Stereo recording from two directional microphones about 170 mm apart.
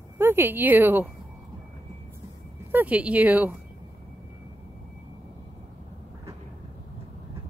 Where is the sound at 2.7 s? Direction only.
10° right (ahead or behind).